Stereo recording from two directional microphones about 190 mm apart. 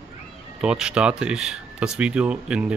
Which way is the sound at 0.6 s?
5° right (ahead or behind).